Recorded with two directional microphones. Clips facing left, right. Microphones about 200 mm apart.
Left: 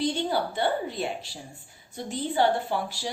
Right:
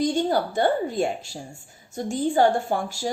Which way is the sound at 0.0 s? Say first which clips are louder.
Right 4 dB; 45° right (ahead or behind).